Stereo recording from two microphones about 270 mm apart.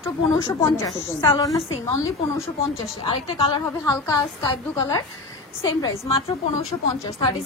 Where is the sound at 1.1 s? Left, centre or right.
Centre.